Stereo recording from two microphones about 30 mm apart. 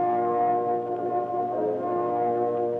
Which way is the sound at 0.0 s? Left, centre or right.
Centre.